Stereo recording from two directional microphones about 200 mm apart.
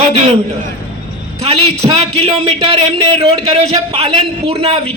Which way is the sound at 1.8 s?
30° right (ahead or behind).